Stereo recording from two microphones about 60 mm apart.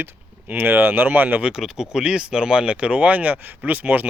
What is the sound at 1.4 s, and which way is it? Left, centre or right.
Speech, centre.